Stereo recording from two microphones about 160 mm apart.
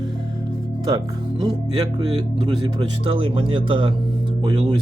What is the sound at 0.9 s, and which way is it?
Speech, 25° right (ahead or behind).